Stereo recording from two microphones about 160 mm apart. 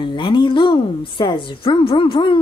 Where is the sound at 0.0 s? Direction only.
30° left (ahead or behind).